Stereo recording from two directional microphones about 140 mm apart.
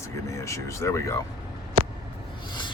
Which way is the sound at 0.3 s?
20° left (ahead or behind).